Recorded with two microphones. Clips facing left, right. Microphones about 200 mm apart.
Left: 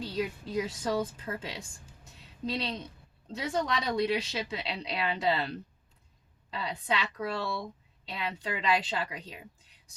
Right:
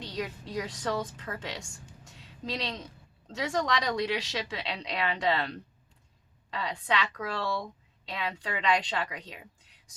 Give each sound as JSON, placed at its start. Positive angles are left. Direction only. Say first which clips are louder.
{"t": 0.0, "sound": "a woman's voice", "louder": "left 3 dB", "side_deg": 5}
{"t": 1.5, "sound": "a sound", "louder": "right 2 dB", "side_deg": -80}
{"t": 2.2, "sound": "speech", "louder": "left 2 dB", "side_deg": 5}
{"t": 3.3, "sound": "speech", "louder": "right 1 dB", "side_deg": -85}
{"t": 3.8, "sound": "a woman's voice", "louder": "left 1 dB", "side_deg": 5}